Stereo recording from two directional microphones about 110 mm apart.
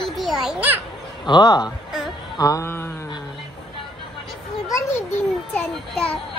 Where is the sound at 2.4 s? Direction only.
30° left (ahead or behind).